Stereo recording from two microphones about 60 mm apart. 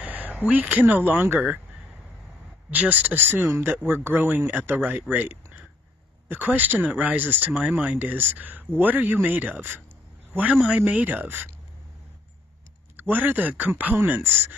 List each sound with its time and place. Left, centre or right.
0.0 s speech: right
2.7 s speech: right
12.9 s speech: right